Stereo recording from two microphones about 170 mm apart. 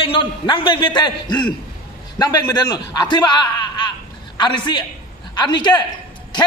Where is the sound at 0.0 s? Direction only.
30° left (ahead or behind).